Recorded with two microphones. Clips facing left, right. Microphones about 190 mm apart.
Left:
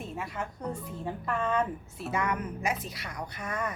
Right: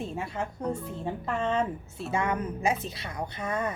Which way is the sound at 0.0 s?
30° right (ahead or behind).